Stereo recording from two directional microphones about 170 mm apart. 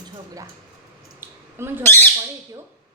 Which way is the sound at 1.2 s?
15° right (ahead or behind).